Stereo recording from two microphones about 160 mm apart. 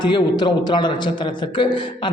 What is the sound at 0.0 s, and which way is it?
A man's voice, 25° left (ahead or behind).